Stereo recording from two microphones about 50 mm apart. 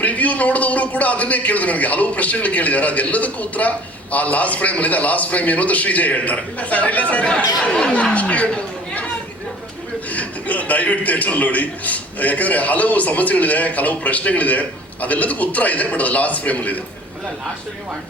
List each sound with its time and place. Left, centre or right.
0.0 s a man's voice: left
8.1 s speech: left
10.1 s a man's voice: left